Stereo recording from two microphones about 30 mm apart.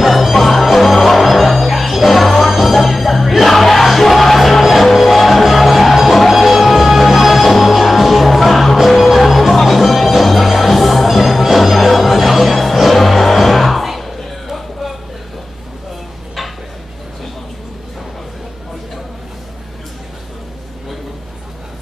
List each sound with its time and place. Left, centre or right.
0.0 s music: centre